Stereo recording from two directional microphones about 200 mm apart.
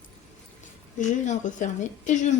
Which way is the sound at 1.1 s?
40° left (ahead or behind).